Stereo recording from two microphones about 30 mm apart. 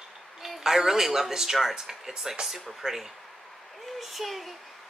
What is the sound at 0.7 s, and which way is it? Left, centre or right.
Speech, centre.